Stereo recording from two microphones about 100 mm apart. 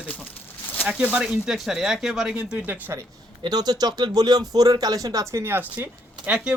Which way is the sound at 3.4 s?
45° right (ahead or behind).